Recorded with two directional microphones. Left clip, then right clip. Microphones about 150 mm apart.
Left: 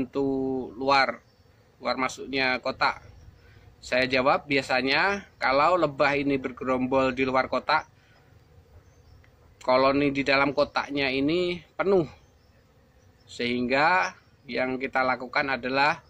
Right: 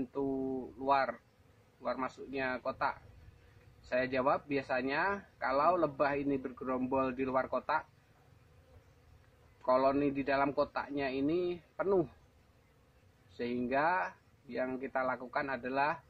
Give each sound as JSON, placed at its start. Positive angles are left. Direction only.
{"t": 0.0, "sound": "speech", "side_deg": 15}
{"t": 9.7, "sound": "speech", "side_deg": 15}
{"t": 13.4, "sound": "speech", "side_deg": 15}